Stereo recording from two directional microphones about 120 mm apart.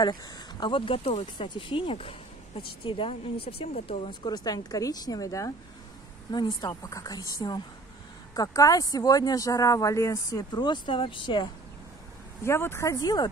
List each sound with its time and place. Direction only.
0.0 s speech: 40° left (ahead or behind)
6.3 s speech: 40° left (ahead or behind)
12.4 s speech: 20° left (ahead or behind)